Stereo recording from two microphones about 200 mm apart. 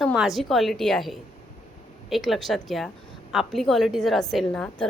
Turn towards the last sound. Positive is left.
turn(degrees=5)  # may be behind; listen again after turning